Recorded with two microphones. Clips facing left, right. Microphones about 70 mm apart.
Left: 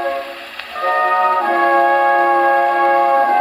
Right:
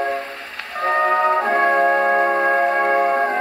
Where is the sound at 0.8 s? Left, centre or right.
Centre.